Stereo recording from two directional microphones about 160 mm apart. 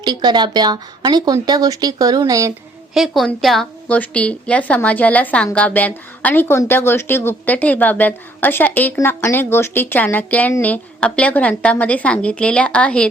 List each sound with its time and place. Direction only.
0.0 s a woman's voice: 25° right (ahead or behind)
2.9 s speech: centre (ahead or behind)